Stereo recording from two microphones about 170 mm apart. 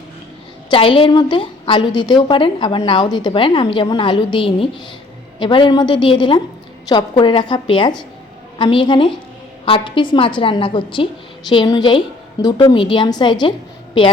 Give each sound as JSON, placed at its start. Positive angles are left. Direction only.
{"t": 0.7, "sound": "a woman's voice", "side_deg": 30}